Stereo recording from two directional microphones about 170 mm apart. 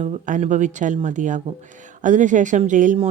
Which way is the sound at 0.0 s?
45° right (ahead or behind).